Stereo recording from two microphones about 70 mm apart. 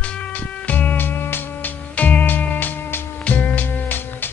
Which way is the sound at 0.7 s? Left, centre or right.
Left.